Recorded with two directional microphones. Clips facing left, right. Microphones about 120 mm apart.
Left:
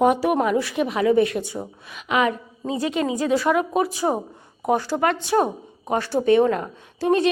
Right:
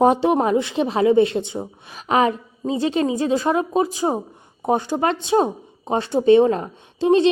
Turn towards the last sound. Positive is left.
turn(degrees=-25)  # may be behind; listen again after turning